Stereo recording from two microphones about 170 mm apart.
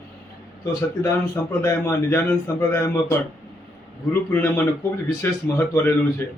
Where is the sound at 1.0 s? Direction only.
15° left (ahead or behind).